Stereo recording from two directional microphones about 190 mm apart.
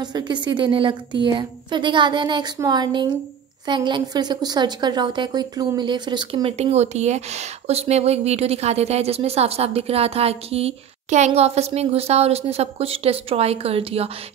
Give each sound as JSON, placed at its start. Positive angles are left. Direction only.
{"t": 0.0, "sound": "a woman's voice", "side_deg": -25}